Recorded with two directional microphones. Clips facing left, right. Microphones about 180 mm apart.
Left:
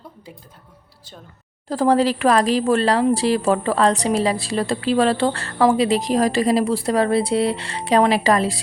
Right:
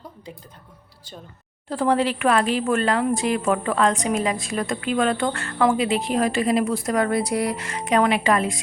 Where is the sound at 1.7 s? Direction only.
40° left (ahead or behind).